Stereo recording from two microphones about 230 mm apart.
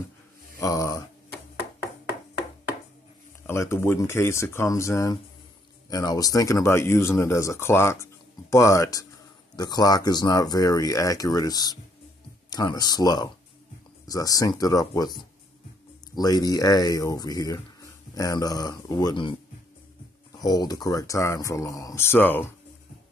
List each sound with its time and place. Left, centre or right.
0.6 s speech: centre
3.4 s speech: centre
16.2 s speech: centre
20.3 s speech: centre